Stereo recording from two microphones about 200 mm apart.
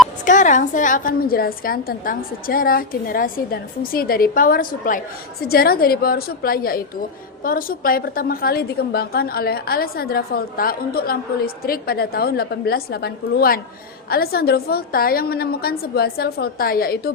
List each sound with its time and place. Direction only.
0.3 s a woman's voice: 40° left (ahead or behind)